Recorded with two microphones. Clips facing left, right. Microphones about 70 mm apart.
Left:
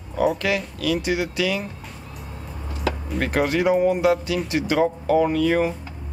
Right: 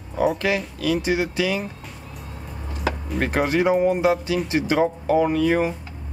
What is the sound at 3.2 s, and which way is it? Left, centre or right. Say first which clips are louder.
Speech: even; right.